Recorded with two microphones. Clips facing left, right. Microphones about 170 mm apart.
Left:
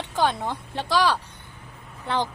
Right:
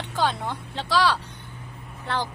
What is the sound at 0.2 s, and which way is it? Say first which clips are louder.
Speech: left 2 dB; 15° left (ahead or behind).